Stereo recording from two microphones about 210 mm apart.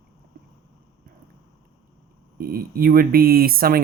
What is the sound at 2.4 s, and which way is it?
Speech, 45° right (ahead or behind).